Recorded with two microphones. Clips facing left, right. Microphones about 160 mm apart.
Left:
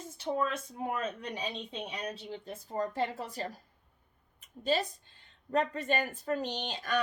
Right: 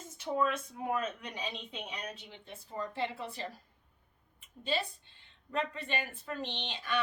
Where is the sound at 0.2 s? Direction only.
35° left (ahead or behind).